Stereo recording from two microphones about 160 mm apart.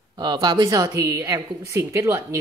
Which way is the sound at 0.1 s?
25° right (ahead or behind).